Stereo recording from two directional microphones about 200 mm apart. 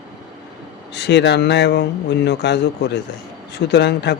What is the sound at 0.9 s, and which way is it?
Speech, 60° left (ahead or behind).